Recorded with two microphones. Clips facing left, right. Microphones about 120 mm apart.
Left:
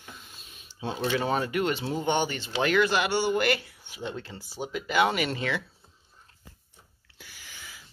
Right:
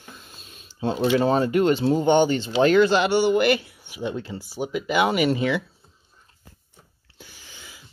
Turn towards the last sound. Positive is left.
turn(degrees=-25)  # may be behind; listen again after turning